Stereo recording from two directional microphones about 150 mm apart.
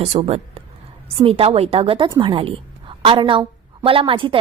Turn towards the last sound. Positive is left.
turn(degrees=-35)  # may be behind; listen again after turning